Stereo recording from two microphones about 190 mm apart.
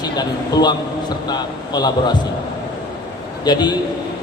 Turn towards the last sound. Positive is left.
turn(degrees=20)  # may be behind; listen again after turning